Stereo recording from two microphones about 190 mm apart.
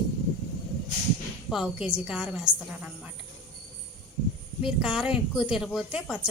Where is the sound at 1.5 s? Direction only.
Centre (ahead or behind).